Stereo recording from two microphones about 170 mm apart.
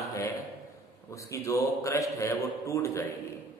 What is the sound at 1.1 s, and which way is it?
A man's voice, 20° left (ahead or behind).